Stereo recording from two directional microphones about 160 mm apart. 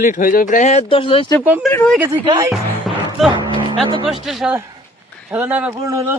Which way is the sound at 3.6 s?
30° right (ahead or behind).